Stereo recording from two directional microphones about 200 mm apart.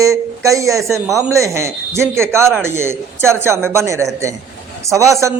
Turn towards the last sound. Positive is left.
turn(degrees=-15)  # may be behind; listen again after turning